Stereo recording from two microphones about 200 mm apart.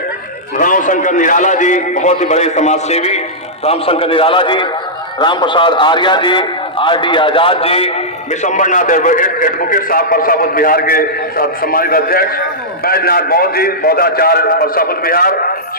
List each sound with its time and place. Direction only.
0.6 s a man's voice: 40° left (ahead or behind)